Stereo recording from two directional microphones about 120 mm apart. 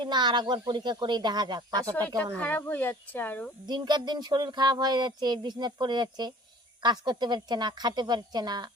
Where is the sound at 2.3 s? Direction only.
15° left (ahead or behind).